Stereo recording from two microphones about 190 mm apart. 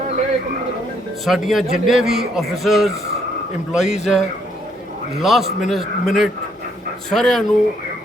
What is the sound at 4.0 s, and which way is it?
A man's voice, centre (ahead or behind).